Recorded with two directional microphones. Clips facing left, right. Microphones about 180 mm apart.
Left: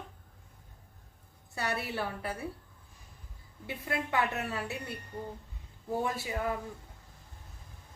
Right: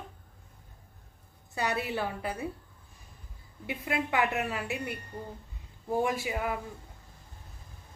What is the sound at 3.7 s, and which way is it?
A woman's voice, 15° right (ahead or behind).